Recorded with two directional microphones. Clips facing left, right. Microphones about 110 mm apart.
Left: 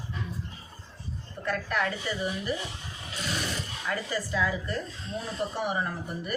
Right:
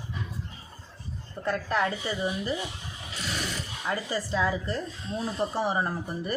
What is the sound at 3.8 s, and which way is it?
Speech, 25° right (ahead or behind).